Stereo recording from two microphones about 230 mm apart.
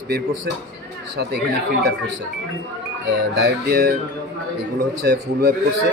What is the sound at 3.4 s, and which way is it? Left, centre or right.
Speech, right.